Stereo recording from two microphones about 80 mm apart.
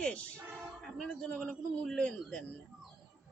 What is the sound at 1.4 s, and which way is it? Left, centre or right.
A man's voice, centre.